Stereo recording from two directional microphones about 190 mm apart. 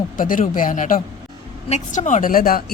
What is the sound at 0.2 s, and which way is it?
Speech, 45° left (ahead or behind).